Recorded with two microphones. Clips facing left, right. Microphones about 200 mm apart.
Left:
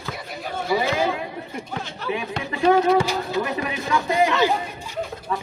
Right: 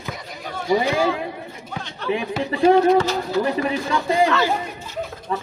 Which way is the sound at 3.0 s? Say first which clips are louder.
Right 2 dB; 10° left (ahead or behind).